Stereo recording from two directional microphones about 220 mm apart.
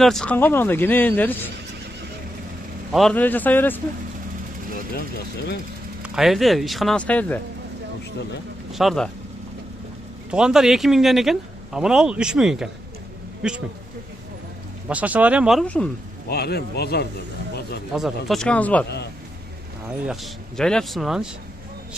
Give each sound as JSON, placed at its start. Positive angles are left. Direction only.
{"t": 0.0, "sound": "speech", "side_deg": 5}
{"t": 2.9, "sound": "speech", "side_deg": 0}
{"t": 4.9, "sound": "speech", "side_deg": 45}
{"t": 6.0, "sound": "a man's voice", "side_deg": 0}
{"t": 8.7, "sound": "a man's voice", "side_deg": 0}
{"t": 10.3, "sound": "a man's voice", "side_deg": -5}
{"t": 14.9, "sound": "a man's voice", "side_deg": -5}
{"t": 16.3, "sound": "speech", "side_deg": 45}
{"t": 17.9, "sound": "a man's voice", "side_deg": 0}
{"t": 20.1, "sound": "a man's voice", "side_deg": 5}